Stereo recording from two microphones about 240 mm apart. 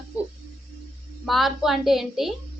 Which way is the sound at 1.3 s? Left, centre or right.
Centre.